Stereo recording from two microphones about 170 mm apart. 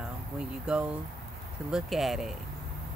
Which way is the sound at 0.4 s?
5° right (ahead or behind).